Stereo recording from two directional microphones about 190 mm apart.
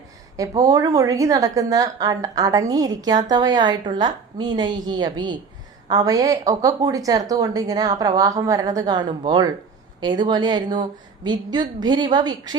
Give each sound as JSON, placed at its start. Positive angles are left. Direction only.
{"t": 0.3, "sound": "a woman's voice", "side_deg": -20}